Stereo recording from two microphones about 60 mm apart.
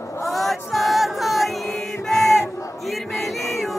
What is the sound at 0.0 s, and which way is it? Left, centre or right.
Chant, left.